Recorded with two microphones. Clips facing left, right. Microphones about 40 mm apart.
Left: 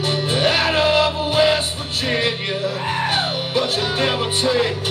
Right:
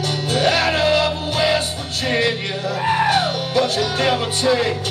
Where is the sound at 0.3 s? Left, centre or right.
Left.